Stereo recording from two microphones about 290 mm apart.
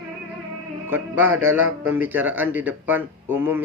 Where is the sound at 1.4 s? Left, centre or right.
Right.